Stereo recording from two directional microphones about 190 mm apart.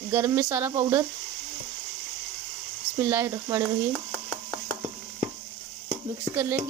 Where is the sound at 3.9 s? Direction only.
20° left (ahead or behind).